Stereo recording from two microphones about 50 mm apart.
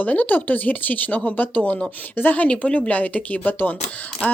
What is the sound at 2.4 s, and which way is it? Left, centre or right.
Speech, left.